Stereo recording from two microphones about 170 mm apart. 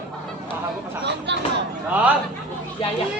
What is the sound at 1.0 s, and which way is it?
Speech, 90° right.